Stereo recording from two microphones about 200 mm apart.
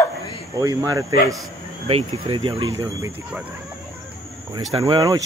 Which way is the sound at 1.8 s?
30° right (ahead or behind).